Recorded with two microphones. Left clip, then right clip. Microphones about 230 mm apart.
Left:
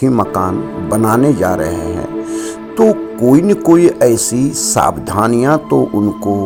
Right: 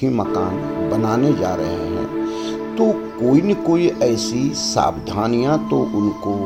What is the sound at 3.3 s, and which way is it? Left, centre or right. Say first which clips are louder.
Speech: left 6 dB; left.